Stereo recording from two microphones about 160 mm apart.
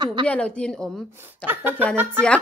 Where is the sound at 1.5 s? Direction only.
10° right (ahead or behind).